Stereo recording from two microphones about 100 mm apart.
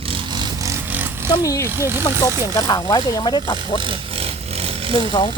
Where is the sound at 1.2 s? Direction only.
40° left (ahead or behind).